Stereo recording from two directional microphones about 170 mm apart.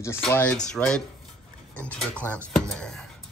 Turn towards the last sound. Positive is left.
turn(degrees=5)  # may be behind; listen again after turning